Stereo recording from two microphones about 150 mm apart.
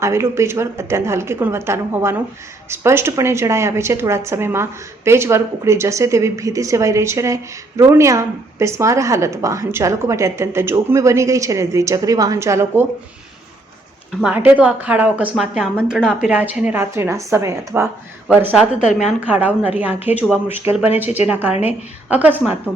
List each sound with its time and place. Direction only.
0.0 s a woman's voice: 20° right (ahead or behind)
14.3 s a woman's voice: 10° right (ahead or behind)
18.3 s a woman's voice: 5° right (ahead or behind)